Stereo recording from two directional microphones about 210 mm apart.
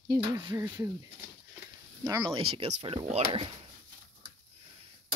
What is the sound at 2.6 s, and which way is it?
Speech, 25° right (ahead or behind).